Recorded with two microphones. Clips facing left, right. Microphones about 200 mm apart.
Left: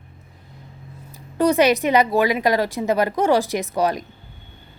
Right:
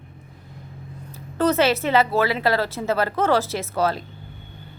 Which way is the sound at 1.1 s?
15° left (ahead or behind).